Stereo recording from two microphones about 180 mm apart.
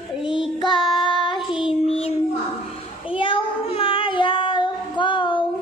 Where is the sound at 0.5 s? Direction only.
25° left (ahead or behind).